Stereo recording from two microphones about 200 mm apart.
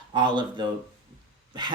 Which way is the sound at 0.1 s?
20° right (ahead or behind).